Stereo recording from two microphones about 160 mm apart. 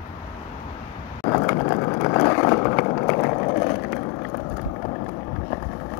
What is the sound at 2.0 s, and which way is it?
Vehicle, 15° left (ahead or behind).